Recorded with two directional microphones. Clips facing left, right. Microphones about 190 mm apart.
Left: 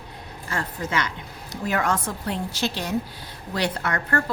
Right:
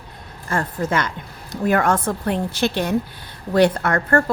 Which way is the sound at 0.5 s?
50° right (ahead or behind).